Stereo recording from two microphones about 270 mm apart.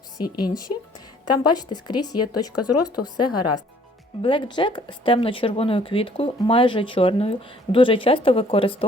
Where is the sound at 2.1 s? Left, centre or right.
Left.